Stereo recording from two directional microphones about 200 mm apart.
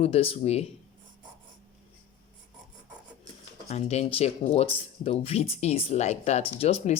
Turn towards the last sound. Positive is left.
turn(degrees=30)  # may be behind; listen again after turning